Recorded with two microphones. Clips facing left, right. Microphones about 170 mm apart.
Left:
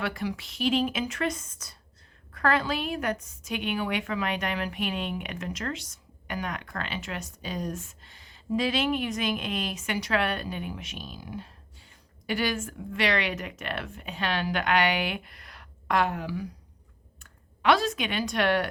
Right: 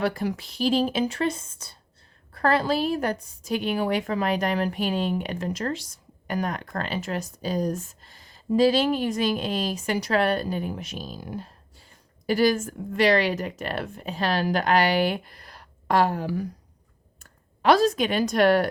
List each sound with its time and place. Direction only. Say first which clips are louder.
0.0 s a woman's voice: right 5 dB; 40° right (ahead or behind)